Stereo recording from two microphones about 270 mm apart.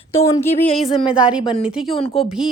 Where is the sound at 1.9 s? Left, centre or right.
Left.